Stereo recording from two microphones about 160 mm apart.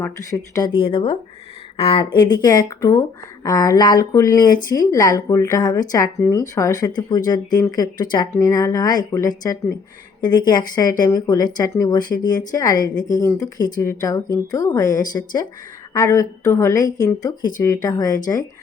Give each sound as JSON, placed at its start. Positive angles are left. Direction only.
{"t": 0.0, "sound": "speech", "side_deg": 20}